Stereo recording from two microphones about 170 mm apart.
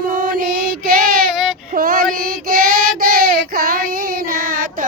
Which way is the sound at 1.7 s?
60° right (ahead or behind).